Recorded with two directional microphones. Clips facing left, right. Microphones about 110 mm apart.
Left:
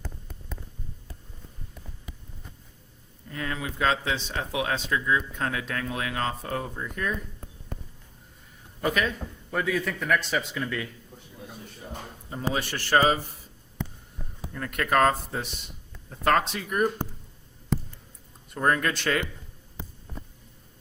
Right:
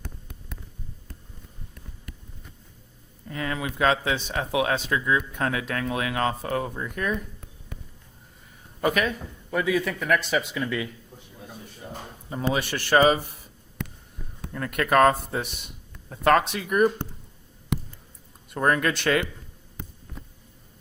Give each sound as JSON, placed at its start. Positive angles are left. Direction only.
{"t": 3.2, "sound": "speech", "side_deg": -80}
{"t": 8.8, "sound": "a man's voice", "side_deg": -60}
{"t": 9.6, "sound": "speech", "side_deg": -10}
{"t": 11.3, "sound": "a sound", "side_deg": 0}
{"t": 12.4, "sound": "speech", "side_deg": -70}
{"t": 14.4, "sound": "a sound", "side_deg": -80}
{"t": 14.8, "sound": "speech", "side_deg": -85}
{"t": 16.0, "sound": "speech", "side_deg": -90}
{"t": 16.6, "sound": "speech", "side_deg": -75}
{"t": 18.5, "sound": "speech", "side_deg": -80}